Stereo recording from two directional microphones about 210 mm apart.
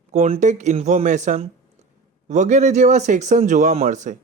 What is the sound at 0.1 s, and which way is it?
Speech, 35° right (ahead or behind).